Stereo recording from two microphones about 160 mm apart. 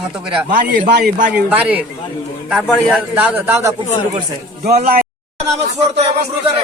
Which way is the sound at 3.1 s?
10° right (ahead or behind).